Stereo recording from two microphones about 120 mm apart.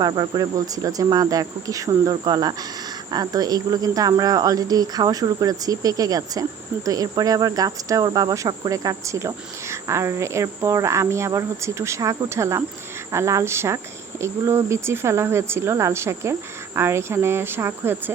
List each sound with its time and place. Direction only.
0.0 s speech: 35° right (ahead or behind)